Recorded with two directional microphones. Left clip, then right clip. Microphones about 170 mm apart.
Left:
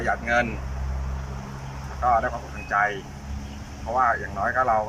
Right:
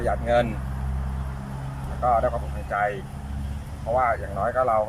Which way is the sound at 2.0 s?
15° right (ahead or behind).